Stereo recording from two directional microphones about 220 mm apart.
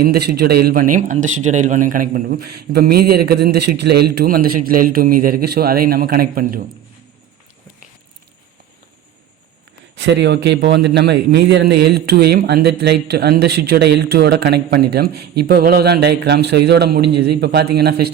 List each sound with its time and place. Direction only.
0.0 s a man's voice: 45° right (ahead or behind)
10.1 s a man's voice: 50° right (ahead or behind)